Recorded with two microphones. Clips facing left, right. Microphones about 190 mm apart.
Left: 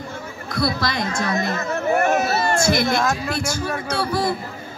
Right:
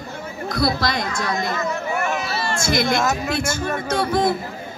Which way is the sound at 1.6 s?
40° left (ahead or behind).